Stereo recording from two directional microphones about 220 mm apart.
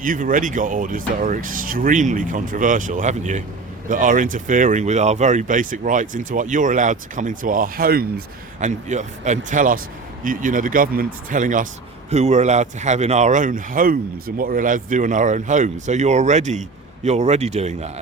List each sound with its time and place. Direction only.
0.0 s speech: 40° right (ahead or behind)